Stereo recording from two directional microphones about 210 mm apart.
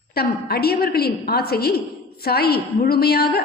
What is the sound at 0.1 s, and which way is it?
A woman's voice, 45° left (ahead or behind).